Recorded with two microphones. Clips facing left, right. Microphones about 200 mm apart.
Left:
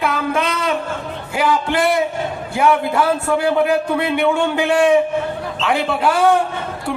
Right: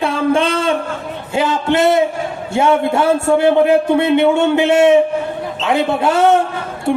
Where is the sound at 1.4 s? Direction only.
25° right (ahead or behind).